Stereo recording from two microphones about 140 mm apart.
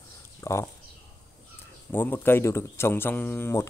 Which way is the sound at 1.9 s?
15° left (ahead or behind).